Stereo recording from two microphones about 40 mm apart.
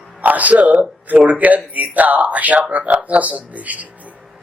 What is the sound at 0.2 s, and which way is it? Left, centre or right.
Speech, right.